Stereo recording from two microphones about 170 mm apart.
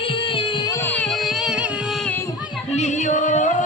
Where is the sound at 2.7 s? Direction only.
45° left (ahead or behind).